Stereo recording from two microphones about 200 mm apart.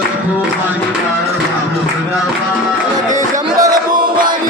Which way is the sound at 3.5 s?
20° right (ahead or behind).